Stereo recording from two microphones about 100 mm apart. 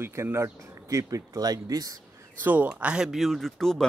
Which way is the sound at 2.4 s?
15° right (ahead or behind).